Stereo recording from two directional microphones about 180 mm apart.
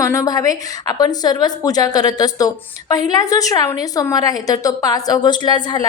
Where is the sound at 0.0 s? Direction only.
20° left (ahead or behind).